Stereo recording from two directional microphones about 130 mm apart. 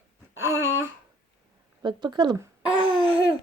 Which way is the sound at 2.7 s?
35° left (ahead or behind).